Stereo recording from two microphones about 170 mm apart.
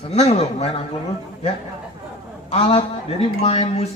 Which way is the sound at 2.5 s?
35° left (ahead or behind).